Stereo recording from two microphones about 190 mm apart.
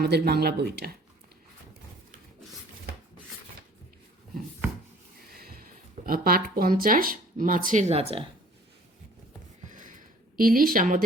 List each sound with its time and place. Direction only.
0.0 s speech: 55° right (ahead or behind)
5.3 s speech: 50° right (ahead or behind); by 8.2 s 35° right (ahead or behind)
9.6 s a sound: 40° right (ahead or behind)
10.3 s speech: 50° right (ahead or behind)